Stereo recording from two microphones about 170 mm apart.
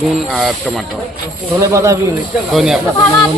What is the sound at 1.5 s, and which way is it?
Speech, 15° right (ahead or behind).